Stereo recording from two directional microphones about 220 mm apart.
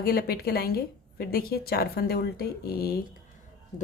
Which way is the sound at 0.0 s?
45° left (ahead or behind).